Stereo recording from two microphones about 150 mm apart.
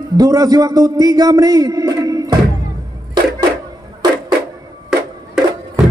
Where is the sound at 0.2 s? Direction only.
25° right (ahead or behind).